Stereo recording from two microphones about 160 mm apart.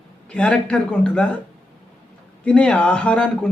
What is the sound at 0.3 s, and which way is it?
Speech, 5° left (ahead or behind).